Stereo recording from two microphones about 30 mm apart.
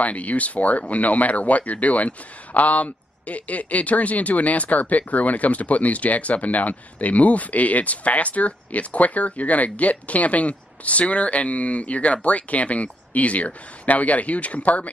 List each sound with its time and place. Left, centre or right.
0.0 s speech: left